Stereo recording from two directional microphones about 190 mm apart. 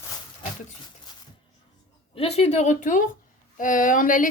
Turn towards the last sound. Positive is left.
turn(degrees=45)  # may be behind; listen again after turning